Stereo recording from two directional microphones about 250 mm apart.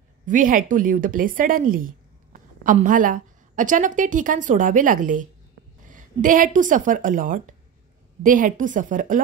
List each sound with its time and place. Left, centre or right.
0.3 s a woman's voice: right